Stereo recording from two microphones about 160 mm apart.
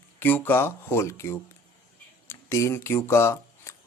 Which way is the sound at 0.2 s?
10° left (ahead or behind).